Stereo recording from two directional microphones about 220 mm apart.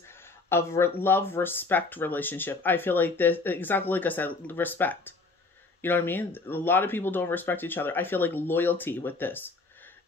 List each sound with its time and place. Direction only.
0.5 s speech: 10° left (ahead or behind)